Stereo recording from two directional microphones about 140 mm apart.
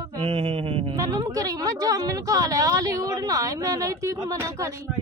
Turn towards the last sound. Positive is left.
turn(degrees=-20)  # may be behind; listen again after turning